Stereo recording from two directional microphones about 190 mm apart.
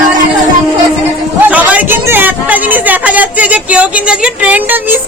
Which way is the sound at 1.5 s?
10° right (ahead or behind).